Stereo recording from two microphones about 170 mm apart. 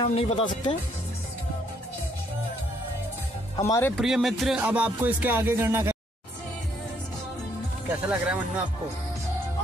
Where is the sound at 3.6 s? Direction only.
15° left (ahead or behind).